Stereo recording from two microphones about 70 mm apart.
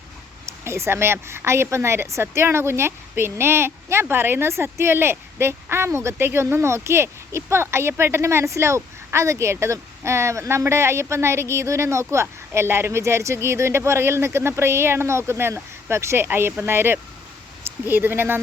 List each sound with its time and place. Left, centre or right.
0.6 s a woman's voice: right